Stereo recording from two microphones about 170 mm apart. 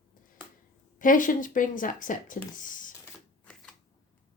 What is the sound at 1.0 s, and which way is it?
Speech, 50° left (ahead or behind).